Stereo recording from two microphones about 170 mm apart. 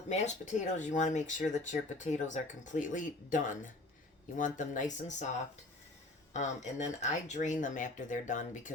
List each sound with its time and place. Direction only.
0.1 s speech: 45° left (ahead or behind)
6.3 s speech: 45° left (ahead or behind)